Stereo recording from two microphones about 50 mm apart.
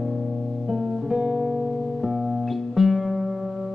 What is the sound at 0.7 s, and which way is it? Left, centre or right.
Music, centre.